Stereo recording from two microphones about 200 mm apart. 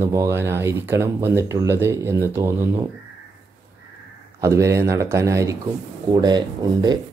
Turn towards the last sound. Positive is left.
turn(degrees=-20)  # may be behind; listen again after turning